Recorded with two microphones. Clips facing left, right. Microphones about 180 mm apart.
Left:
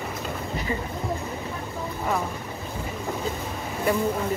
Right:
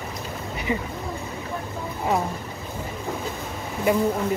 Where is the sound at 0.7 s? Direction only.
20° right (ahead or behind).